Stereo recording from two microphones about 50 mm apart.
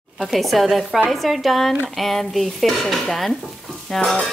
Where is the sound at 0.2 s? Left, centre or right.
Centre.